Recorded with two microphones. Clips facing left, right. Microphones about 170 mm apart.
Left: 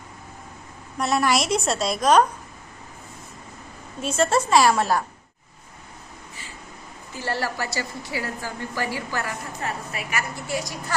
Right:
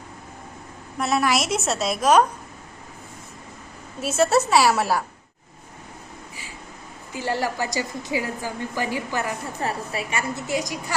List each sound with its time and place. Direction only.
0.9 s a woman's voice: centre (ahead or behind)
4.0 s a woman's voice: 5° right (ahead or behind)
7.1 s a woman's voice: 15° right (ahead or behind)
9.6 s a woman's voice: 30° right (ahead or behind)